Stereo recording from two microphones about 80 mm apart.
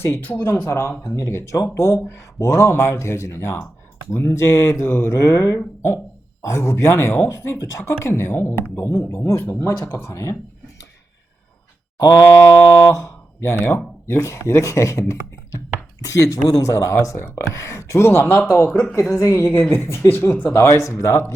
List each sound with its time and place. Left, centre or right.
0.0 s speech: left
0.6 s speech: left
11.9 s a sound: left
12.4 s speech: left
19.1 s speech: left
19.5 s speech: left
20.7 s speech: left